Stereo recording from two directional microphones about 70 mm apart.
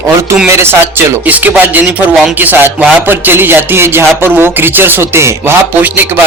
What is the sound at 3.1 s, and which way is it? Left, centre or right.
Speech, right.